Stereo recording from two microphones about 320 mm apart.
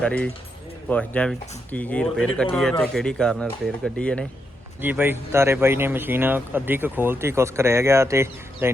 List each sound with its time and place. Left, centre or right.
0.0 s speech: centre